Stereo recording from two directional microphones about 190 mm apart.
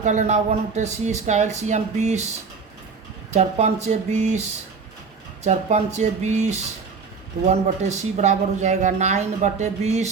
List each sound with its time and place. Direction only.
0.0 s speech: 40° right (ahead or behind)
3.3 s speech: 35° right (ahead or behind)
5.4 s speech: 35° right (ahead or behind)